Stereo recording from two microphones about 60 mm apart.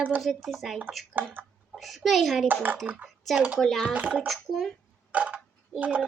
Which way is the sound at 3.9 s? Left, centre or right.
Right.